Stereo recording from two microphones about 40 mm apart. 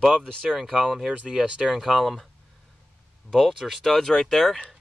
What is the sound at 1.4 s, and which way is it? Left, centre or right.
Speech, right.